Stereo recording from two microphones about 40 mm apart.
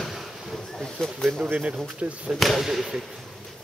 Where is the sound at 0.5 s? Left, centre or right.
Centre.